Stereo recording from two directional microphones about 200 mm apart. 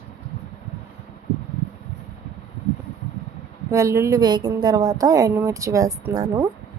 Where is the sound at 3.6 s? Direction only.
15° right (ahead or behind).